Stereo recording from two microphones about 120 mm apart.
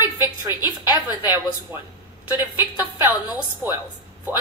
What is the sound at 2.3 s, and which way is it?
A woman's voice, 15° right (ahead or behind).